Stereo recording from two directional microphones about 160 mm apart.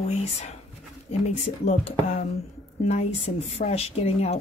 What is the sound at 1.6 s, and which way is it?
A woman's voice, 40° left (ahead or behind).